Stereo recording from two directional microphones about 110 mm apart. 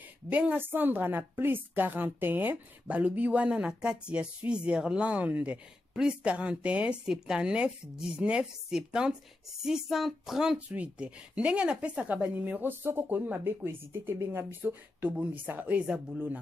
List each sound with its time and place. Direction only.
0.3 s a woman's voice: 15° right (ahead or behind)